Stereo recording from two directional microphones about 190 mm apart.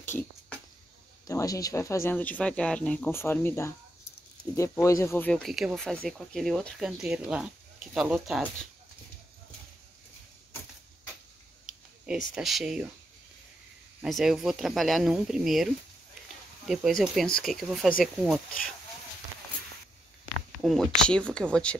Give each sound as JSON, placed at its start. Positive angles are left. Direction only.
{"t": 1.2, "sound": "speech", "side_deg": 20}
{"t": 12.1, "sound": "speech", "side_deg": 0}
{"t": 14.0, "sound": "speech", "side_deg": 0}
{"t": 20.6, "sound": "speech", "side_deg": 5}